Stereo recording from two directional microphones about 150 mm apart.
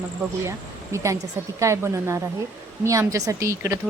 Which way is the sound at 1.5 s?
20° right (ahead or behind).